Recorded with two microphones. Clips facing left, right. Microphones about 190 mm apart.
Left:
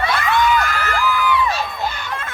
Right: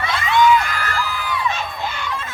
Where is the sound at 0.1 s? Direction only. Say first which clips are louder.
Right 5 dB; 60° left (ahead or behind).